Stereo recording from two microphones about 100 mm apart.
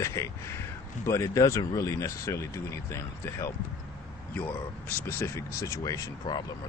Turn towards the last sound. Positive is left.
turn(degrees=35)  # may be behind; listen again after turning